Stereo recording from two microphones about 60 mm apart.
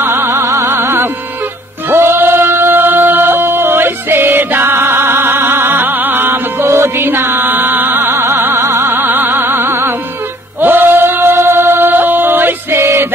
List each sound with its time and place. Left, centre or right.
0.0 s music: right
0.7 s music: right
2.5 s chant: right
6.6 s music: right
7.7 s music: right
8.0 s music: right
8.3 s music: right
8.5 s music: right
8.9 s music: right
12.7 s music: right